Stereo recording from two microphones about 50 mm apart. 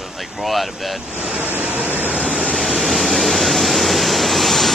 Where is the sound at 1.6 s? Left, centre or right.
Right.